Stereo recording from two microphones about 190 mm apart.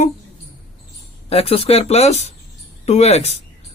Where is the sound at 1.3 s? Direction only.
30° left (ahead or behind).